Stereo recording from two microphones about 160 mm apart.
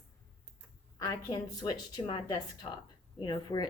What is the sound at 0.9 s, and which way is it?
A woman's voice, 25° left (ahead or behind).